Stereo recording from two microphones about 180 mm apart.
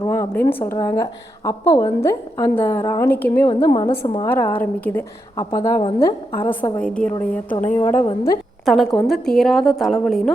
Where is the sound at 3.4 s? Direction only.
25° left (ahead or behind).